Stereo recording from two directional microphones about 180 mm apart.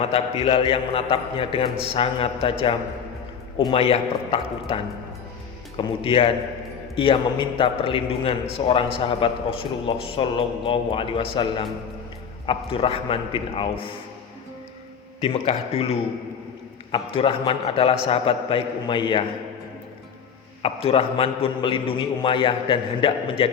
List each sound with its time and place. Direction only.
0.0 s a man's voice: 30° left (ahead or behind)
5.7 s a man's voice: 30° left (ahead or behind)
15.2 s a man's voice: 35° left (ahead or behind)
20.6 s a man's voice: 35° left (ahead or behind)